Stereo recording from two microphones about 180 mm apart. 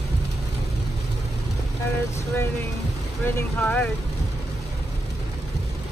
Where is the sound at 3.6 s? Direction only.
10° left (ahead or behind).